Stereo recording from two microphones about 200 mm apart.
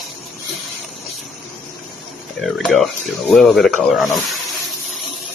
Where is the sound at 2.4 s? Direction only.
Centre (ahead or behind).